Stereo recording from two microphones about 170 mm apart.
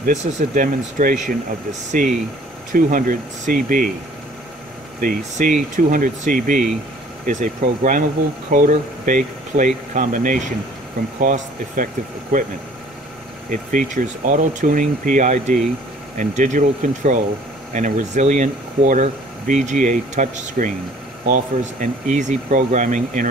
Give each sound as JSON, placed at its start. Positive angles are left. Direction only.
{"t": 0.0, "sound": "speech", "side_deg": -45}
{"t": 5.0, "sound": "speech", "side_deg": -50}
{"t": 13.5, "sound": "speech", "side_deg": -50}